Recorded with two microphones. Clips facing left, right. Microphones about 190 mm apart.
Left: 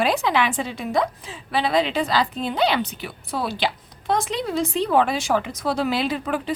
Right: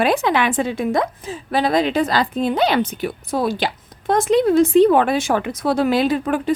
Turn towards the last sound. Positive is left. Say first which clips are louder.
# right 6 dB
turn(degrees=-50)  # may be behind; listen again after turning